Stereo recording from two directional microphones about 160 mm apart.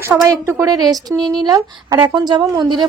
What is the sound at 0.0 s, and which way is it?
A woman's voice, 15° right (ahead or behind).